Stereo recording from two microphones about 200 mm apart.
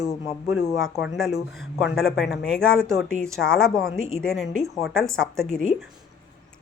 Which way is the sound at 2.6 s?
10° right (ahead or behind).